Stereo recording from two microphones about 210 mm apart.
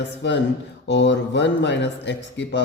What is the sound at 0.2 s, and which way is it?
Speech, 60° left (ahead or behind).